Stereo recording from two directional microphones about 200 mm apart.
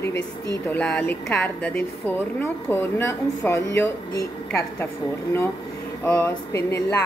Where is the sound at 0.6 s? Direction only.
5° left (ahead or behind).